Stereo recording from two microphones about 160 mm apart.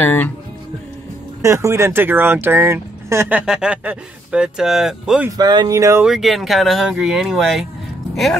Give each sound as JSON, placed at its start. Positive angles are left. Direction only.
{"t": 0.0, "sound": "speech", "side_deg": 10}
{"t": 1.4, "sound": "speech", "side_deg": -15}
{"t": 5.4, "sound": "speech", "side_deg": -25}
{"t": 6.0, "sound": "speech", "side_deg": 0}